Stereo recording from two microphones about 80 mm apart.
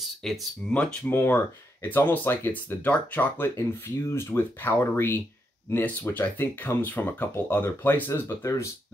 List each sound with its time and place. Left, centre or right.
0.2 s speech: centre
1.1 s speech: left